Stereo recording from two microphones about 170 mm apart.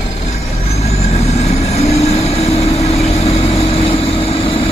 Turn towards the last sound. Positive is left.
turn(degrees=35)  # may be behind; listen again after turning